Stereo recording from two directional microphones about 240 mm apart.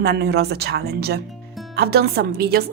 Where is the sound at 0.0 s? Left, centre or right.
Right.